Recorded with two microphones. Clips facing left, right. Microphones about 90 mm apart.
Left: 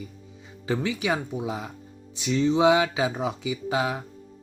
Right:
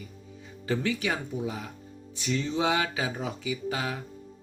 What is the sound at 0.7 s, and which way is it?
Speech, 20° left (ahead or behind).